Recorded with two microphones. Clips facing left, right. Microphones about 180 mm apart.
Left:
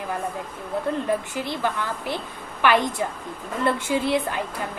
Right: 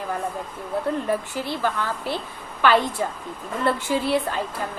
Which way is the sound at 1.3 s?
15° left (ahead or behind).